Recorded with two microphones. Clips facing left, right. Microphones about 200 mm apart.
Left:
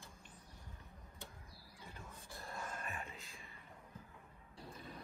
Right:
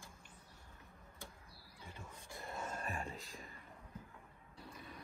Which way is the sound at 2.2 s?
Centre (ahead or behind).